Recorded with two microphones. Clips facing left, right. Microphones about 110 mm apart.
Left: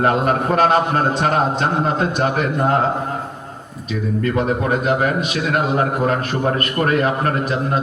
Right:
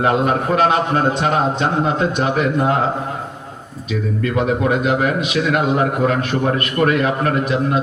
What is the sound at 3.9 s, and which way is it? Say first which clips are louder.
A man's voice: even; 40° left (ahead or behind).